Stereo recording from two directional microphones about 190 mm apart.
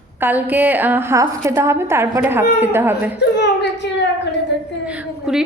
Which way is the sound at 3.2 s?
65° left (ahead or behind).